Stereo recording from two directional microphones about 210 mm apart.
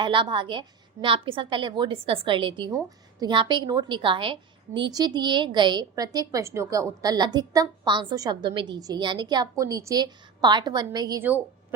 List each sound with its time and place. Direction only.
0.0 s a woman's voice: 25° right (ahead or behind)